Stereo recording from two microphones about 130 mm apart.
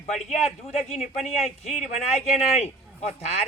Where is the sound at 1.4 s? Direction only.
60° left (ahead or behind).